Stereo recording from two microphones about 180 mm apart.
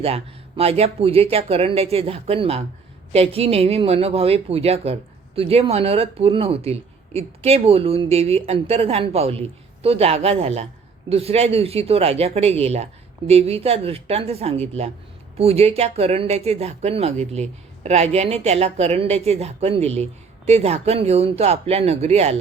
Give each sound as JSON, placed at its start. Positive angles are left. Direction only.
{"t": 0.0, "sound": "a woman's voice", "side_deg": -35}